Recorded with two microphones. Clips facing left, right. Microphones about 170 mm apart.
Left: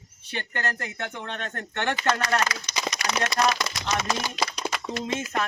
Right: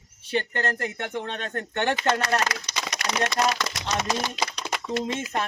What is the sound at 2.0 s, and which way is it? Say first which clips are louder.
Speech: left 1 dB; 25° right (ahead or behind).